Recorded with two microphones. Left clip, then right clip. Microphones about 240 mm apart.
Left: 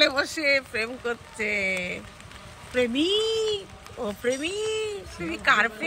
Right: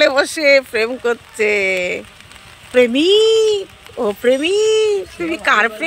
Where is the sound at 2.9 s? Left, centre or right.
Centre.